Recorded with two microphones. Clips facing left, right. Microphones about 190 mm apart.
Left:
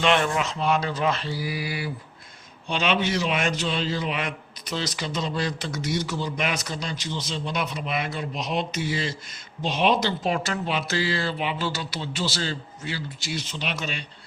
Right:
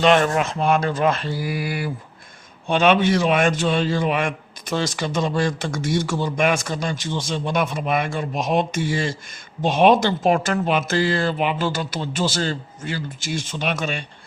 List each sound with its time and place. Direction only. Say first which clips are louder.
0.0 s speech: right 5 dB; 45° right (ahead or behind)